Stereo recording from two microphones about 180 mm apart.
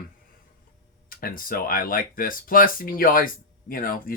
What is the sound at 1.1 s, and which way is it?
Speech, 55° left (ahead or behind).